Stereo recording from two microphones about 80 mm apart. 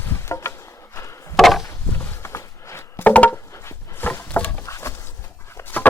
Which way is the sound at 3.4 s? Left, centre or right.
Left.